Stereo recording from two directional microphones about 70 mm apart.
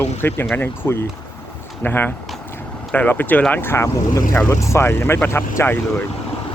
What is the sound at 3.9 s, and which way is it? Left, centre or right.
Speech, left.